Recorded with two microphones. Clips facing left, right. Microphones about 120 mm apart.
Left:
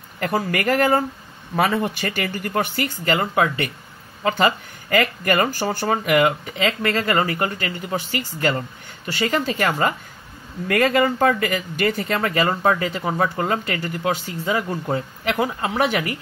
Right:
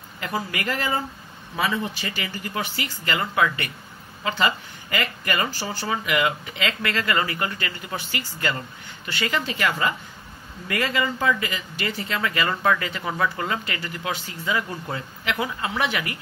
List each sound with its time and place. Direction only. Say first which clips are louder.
0.2 s speech: left 6 dB; 50° left (ahead or behind)
3.1 s speech: left 3 dB; 35° left (ahead or behind)